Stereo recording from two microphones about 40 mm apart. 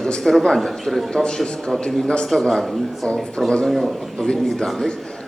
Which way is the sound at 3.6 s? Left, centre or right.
Centre.